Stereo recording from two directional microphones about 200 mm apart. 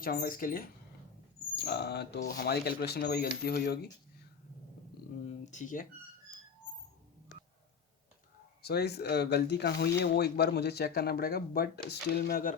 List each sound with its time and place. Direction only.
0.0 s speech: 45° left (ahead or behind)
1.5 s speech: 55° left (ahead or behind)
5.2 s speech: 35° left (ahead or behind)
8.6 s speech: 55° left (ahead or behind)